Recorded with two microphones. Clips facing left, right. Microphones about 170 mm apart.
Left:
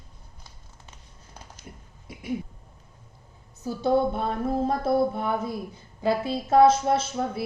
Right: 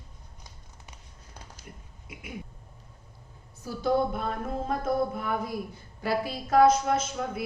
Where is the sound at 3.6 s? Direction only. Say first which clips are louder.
Left 3 dB; 25° left (ahead or behind).